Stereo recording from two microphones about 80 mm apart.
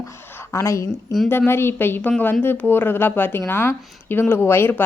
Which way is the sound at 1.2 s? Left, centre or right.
Left.